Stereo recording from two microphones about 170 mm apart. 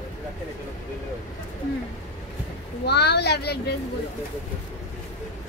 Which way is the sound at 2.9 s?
75° left (ahead or behind).